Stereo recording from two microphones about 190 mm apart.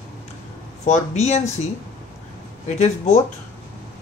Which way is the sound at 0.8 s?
35° left (ahead or behind).